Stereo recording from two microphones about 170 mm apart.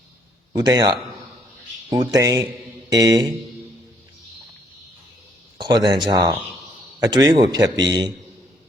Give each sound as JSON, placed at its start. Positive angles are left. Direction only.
{"t": 0.5, "sound": "speech", "side_deg": -25}
{"t": 2.0, "sound": "speech", "side_deg": -20}
{"t": 5.5, "sound": "speech", "side_deg": -25}